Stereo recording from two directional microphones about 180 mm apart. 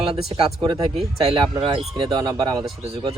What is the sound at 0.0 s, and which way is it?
Speech, 30° right (ahead or behind).